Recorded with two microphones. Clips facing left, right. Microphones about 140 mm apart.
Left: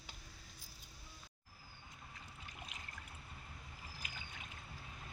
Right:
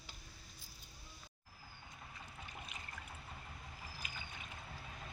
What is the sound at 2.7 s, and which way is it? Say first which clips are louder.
Boat: right 2 dB; 90° left.